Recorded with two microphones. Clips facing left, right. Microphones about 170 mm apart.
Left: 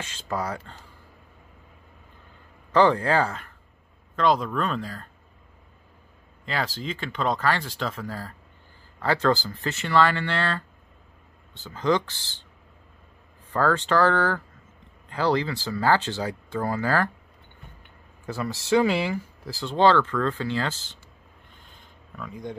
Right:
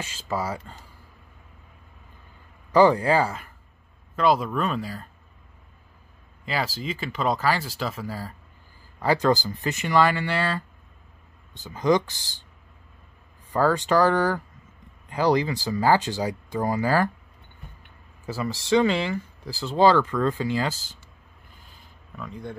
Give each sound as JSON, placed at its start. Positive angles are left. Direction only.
{"t": 0.0, "sound": "speech", "side_deg": -5}
{"t": 2.7, "sound": "speech", "side_deg": -10}
{"t": 6.4, "sound": "speech", "side_deg": -5}
{"t": 13.5, "sound": "speech", "side_deg": -10}
{"t": 18.2, "sound": "speech", "side_deg": -5}
{"t": 18.7, "sound": "speech", "side_deg": 10}
{"t": 19.5, "sound": "speech", "side_deg": -5}
{"t": 21.6, "sound": "a sound", "side_deg": -5}
{"t": 22.3, "sound": "speech", "side_deg": 15}